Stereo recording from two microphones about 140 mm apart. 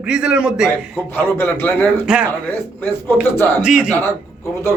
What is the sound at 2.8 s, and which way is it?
Speech, 15° left (ahead or behind).